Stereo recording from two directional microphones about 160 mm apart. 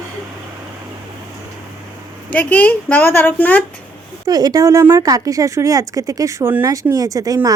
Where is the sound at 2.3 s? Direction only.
10° left (ahead or behind).